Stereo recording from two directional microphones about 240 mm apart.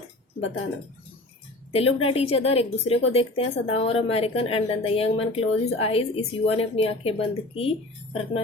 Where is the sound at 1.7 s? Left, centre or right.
Left.